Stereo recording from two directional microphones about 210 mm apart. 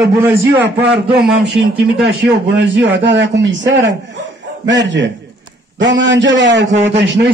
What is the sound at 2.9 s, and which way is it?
Speech, 60° right (ahead or behind).